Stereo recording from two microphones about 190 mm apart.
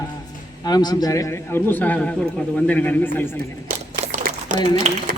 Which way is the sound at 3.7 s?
45° right (ahead or behind).